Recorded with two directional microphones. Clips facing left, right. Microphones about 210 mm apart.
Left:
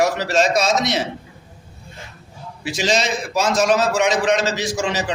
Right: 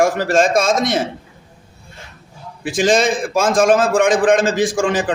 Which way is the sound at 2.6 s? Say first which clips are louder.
Right 6 dB; 50° right (ahead or behind).